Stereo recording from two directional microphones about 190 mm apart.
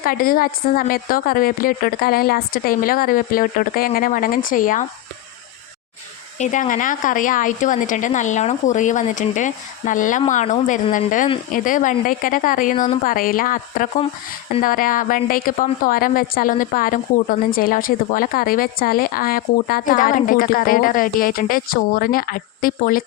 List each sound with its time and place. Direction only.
0.0 s a woman's voice: 50° left (ahead or behind)
6.4 s a woman's voice: 40° left (ahead or behind)